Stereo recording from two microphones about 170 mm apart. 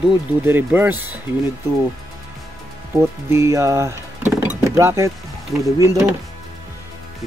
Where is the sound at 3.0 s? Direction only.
15° right (ahead or behind).